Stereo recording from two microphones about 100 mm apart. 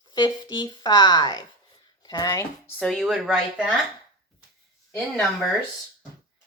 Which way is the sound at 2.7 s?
10° left (ahead or behind).